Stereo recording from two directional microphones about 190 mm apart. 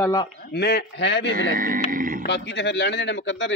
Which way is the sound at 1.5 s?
45° right (ahead or behind).